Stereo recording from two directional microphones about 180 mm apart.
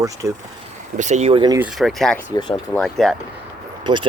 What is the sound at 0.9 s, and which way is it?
Speech, 40° right (ahead or behind).